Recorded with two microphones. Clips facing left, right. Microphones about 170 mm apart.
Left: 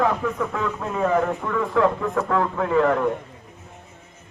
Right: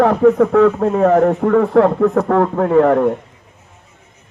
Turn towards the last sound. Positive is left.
turn(degrees=-40)  # may be behind; listen again after turning